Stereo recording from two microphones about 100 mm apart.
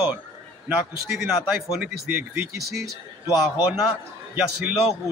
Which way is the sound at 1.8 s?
20° right (ahead or behind).